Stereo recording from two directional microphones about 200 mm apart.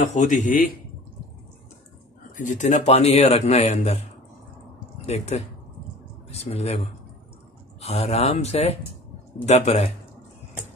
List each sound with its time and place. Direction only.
0.0 s a man's voice: 35° left (ahead or behind)
2.3 s a man's voice: 40° left (ahead or behind)
5.0 s speech: 30° left (ahead or behind)
6.5 s a man's voice: 30° left (ahead or behind)
7.8 s a man's voice: 30° left (ahead or behind)